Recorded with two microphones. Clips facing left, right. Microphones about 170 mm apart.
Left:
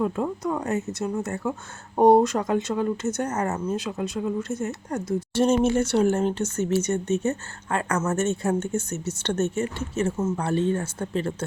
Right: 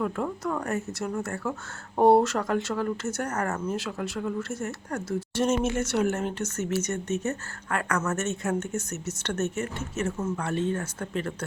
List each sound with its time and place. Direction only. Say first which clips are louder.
0.0 s speech: left 3 dB; 20° left (ahead or behind)
5.3 s speech: left 5 dB; 30° left (ahead or behind)